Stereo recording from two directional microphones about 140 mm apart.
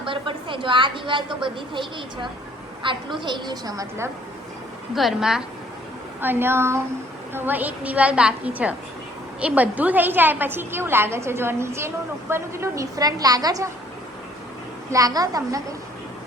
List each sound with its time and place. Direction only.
0.0 s a woman's voice: 40° right (ahead or behind); by 4.1 s 20° right (ahead or behind)
4.9 s a woman's voice: centre (ahead or behind)
6.2 s a woman's voice: 15° right (ahead or behind)
14.8 s a woman's voice: 25° right (ahead or behind)